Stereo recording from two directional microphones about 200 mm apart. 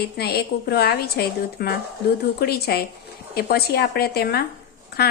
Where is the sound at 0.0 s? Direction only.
50° left (ahead or behind).